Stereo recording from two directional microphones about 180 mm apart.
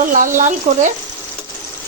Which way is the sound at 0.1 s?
45° right (ahead or behind).